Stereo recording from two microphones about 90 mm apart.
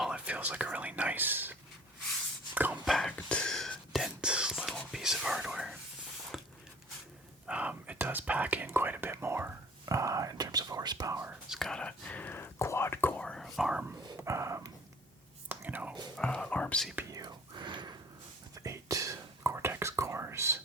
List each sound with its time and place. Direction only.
0.0 s speech: 10° right (ahead or behind)
2.8 s whispering: 5° left (ahead or behind)
6.3 s a sound: centre (ahead or behind)
7.4 s speech: 15° right (ahead or behind); by 11.3 s 40° right (ahead or behind)
11.4 s whispering: 5° right (ahead or behind)
11.7 s speech: 10° left (ahead or behind)
13.2 s whispering: 5° left (ahead or behind)
13.6 s speech: 10° right (ahead or behind)
14.2 s a sound: 30° right (ahead or behind)
15.4 s whispering: 20° right (ahead or behind)
16.1 s speech: 10° left (ahead or behind)
17.1 s whispering: 50° right (ahead or behind)
18.5 s whispering: 40° right (ahead or behind)